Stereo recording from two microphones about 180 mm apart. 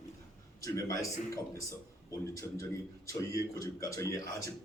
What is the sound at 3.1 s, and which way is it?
A man's voice, 20° left (ahead or behind).